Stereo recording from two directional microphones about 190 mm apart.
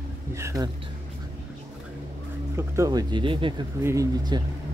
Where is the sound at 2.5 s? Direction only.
15° right (ahead or behind).